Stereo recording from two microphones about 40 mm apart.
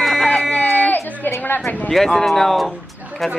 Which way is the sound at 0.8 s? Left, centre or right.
Left.